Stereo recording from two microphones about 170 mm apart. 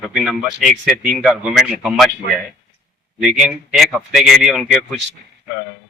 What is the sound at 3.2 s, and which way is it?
Speech, centre (ahead or behind).